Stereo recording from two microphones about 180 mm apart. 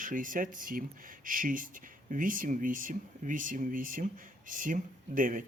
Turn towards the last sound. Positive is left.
turn(degrees=-50)  # may be behind; listen again after turning